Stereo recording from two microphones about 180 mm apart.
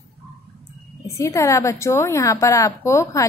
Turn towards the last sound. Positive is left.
turn(degrees=15)  # may be behind; listen again after turning